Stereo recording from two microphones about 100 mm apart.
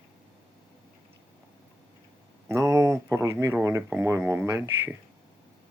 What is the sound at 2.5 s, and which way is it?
Speech, 30° right (ahead or behind).